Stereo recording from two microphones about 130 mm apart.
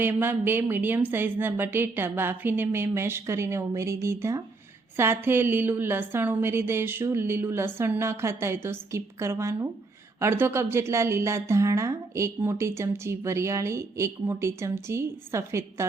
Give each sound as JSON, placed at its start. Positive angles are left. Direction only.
{"t": 0.0, "sound": "a woman's voice", "side_deg": -15}